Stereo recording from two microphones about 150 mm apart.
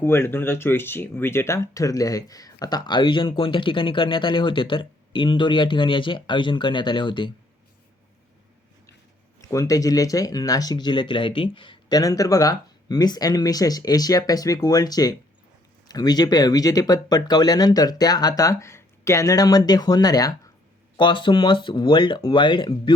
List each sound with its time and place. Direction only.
0.0 s speech: 15° left (ahead or behind); by 7.3 s 30° left (ahead or behind)
9.4 s speech: 20° left (ahead or behind)